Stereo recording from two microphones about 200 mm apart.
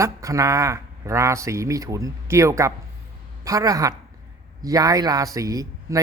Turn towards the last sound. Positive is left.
turn(degrees=-15)  # may be behind; listen again after turning